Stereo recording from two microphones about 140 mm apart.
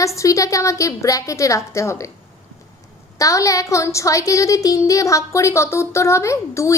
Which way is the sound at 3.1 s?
25° left (ahead or behind).